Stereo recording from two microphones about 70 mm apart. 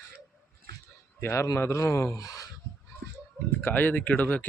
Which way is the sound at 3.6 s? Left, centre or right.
Left.